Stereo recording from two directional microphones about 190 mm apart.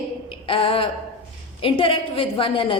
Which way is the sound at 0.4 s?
30° left (ahead or behind).